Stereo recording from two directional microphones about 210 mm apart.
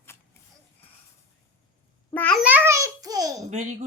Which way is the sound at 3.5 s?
35° right (ahead or behind).